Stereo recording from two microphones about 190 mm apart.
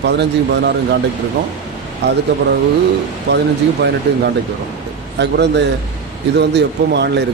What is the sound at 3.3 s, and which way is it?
Speech, 65° right (ahead or behind).